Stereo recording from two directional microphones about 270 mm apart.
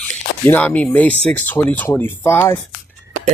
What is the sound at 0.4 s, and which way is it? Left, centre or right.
Speech, centre.